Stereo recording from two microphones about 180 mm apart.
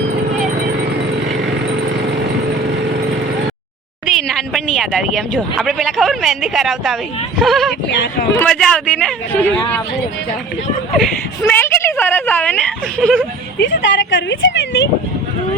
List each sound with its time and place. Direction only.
4.0 s speech: centre (ahead or behind)
7.9 s speech: 75° left (ahead or behind)
8.4 s speech: 5° left (ahead or behind)
11.4 s a woman's voice: 10° left (ahead or behind)
13.6 s a woman's voice: 80° left